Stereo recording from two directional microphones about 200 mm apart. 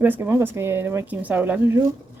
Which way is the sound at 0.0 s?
10° right (ahead or behind).